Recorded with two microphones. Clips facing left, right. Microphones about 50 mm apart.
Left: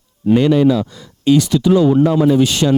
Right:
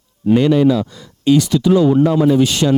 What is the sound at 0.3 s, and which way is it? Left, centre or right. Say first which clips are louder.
Speech: even; left.